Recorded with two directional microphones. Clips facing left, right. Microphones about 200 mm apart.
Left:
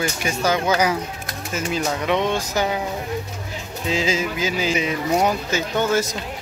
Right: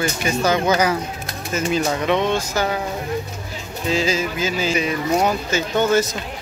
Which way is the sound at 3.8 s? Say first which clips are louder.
Right 2 dB; 20° left (ahead or behind).